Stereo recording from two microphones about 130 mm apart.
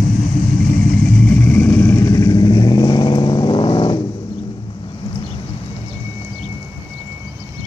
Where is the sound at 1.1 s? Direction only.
10° left (ahead or behind); by 4.0 s 40° left (ahead or behind).